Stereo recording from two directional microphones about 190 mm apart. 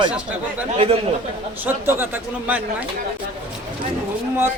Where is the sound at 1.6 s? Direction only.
10° right (ahead or behind).